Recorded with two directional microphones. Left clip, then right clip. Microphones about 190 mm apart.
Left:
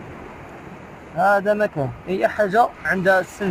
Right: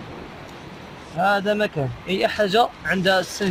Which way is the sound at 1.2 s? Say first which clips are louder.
Left 3 dB; 25° right (ahead or behind).